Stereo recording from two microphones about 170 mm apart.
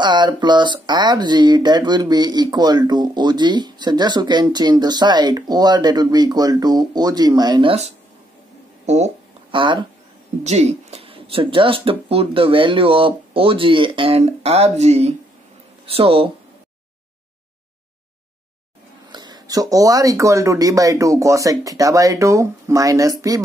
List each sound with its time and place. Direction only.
0.0 s speech: 25° right (ahead or behind)
8.8 s speech: 40° right (ahead or behind)
10.4 s speech: 40° right (ahead or behind)
19.0 s speech: 25° right (ahead or behind)